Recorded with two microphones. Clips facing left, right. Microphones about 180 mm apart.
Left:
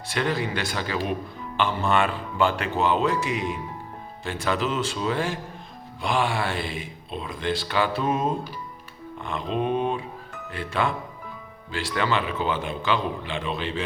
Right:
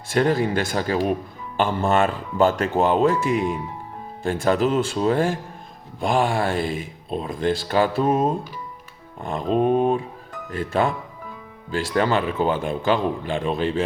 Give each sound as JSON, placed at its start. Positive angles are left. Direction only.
{"t": 0.1, "sound": "speech", "side_deg": -45}